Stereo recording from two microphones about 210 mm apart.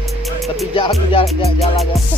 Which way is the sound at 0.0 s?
Centre (ahead or behind).